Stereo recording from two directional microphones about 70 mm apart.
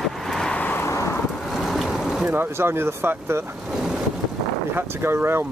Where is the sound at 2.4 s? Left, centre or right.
Right.